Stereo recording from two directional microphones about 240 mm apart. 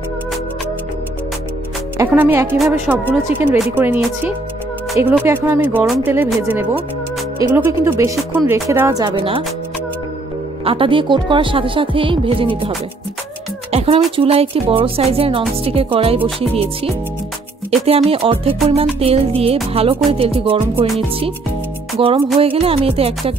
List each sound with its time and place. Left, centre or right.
2.0 s a woman's voice: centre
10.6 s speech: right
13.7 s music: right
14.1 s speech: right
20.6 s a woman's voice: centre
21.9 s music: right
22.4 s speech: right